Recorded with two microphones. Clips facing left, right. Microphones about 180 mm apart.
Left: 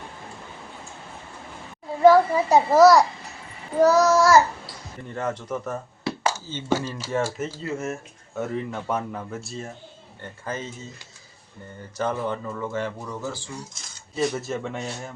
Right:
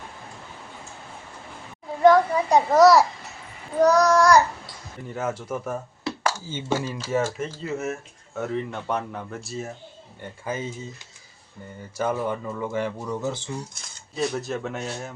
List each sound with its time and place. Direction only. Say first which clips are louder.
2.0 s a child's voice: left 1 dB; 5° left (ahead or behind); by 7.0 s 15° right (ahead or behind)
7.2 s a child's voice: left 1 dB; 5° left (ahead or behind); by 10.7 s 10° right (ahead or behind)
11.8 s speech: right 1 dB; 10° right (ahead or behind)
14.2 s a child's voice: left 1 dB; centre (ahead or behind)